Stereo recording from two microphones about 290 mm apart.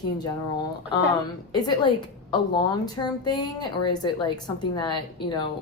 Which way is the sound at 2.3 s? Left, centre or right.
Centre.